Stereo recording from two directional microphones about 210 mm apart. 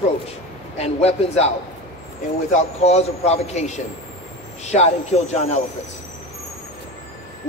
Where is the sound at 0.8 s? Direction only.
30° left (ahead or behind).